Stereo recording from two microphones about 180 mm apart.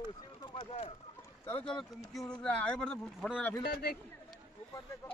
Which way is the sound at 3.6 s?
65° left (ahead or behind).